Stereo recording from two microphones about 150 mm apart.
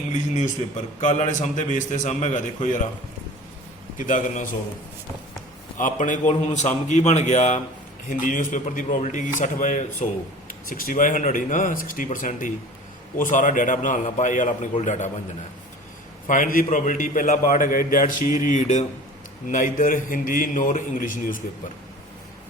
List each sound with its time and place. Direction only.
0.1 s speech: 55° left (ahead or behind)
3.9 s speech: 60° left (ahead or behind)
5.7 s a man's voice: 60° left (ahead or behind)
10.7 s speech: 70° left (ahead or behind); by 15.1 s 55° left (ahead or behind)
16.2 s a man's voice: 60° left (ahead or behind)